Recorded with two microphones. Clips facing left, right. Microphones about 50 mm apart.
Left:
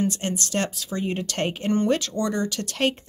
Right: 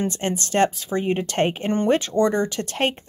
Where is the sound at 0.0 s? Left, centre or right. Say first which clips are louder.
Right 1 dB; right.